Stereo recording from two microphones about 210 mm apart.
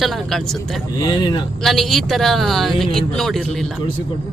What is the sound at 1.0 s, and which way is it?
Speech, 20° left (ahead or behind).